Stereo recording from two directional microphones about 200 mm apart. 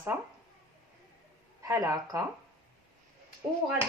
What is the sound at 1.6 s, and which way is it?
Speech, 15° right (ahead or behind).